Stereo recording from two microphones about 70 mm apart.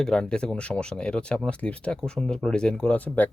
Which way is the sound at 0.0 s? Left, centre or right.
Centre.